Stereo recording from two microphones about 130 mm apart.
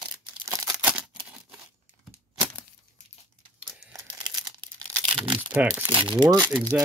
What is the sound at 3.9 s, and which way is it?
Crumpling, 30° right (ahead or behind).